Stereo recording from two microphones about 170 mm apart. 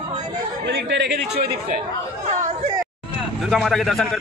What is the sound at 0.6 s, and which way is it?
Speech, 85° right.